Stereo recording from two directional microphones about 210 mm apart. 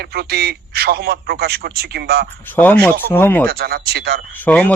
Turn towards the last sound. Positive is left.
turn(degrees=5)  # may be behind; listen again after turning